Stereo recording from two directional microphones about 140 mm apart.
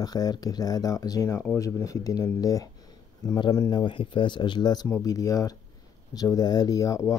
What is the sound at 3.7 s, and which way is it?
Speech, 35° left (ahead or behind).